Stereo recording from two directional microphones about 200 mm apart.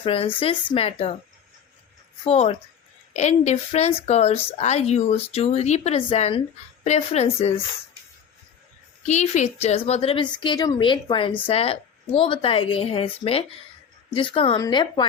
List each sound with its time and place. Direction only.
0.0 s a woman's voice: 30° left (ahead or behind)
2.2 s speech: 30° left (ahead or behind)
9.0 s a woman's voice: 35° left (ahead or behind)